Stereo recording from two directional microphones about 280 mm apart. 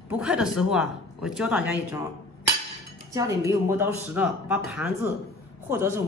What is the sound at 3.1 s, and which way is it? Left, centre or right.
Speech, centre.